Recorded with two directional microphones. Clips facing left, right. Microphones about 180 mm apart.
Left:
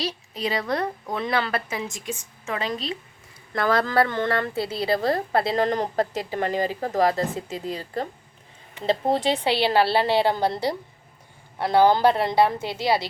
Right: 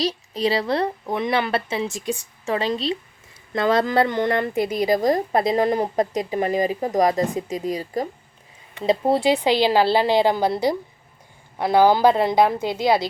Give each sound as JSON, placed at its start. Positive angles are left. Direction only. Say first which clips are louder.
{"t": 0.0, "sound": "a woman's voice", "louder": "right 6 dB", "side_deg": -35}